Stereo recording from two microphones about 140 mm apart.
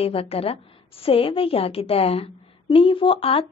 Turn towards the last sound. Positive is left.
turn(degrees=40)  # may be behind; listen again after turning